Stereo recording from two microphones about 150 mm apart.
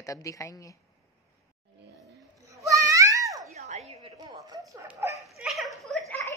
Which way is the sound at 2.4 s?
20° right (ahead or behind).